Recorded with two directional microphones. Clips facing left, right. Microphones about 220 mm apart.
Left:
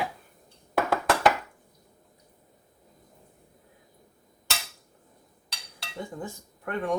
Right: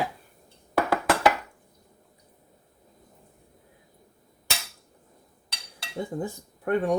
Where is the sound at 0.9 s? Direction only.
Centre (ahead or behind).